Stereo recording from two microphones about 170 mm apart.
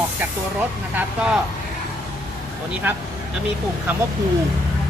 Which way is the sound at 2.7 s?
10° right (ahead or behind).